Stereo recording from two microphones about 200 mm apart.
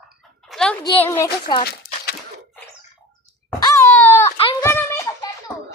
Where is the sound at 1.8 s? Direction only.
50° left (ahead or behind).